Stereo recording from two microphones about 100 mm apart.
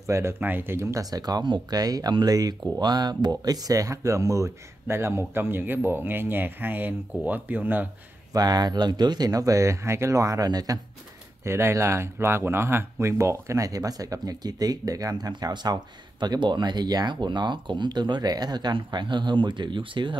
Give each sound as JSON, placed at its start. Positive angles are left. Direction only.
{"t": 0.0, "sound": "speech", "side_deg": -30}
{"t": 8.3, "sound": "speech", "side_deg": -40}
{"t": 11.4, "sound": "speech", "side_deg": -25}